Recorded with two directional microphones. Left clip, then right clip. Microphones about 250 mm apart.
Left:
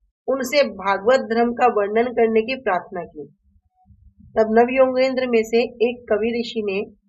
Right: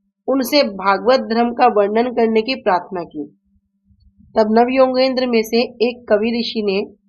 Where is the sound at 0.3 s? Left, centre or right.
Right.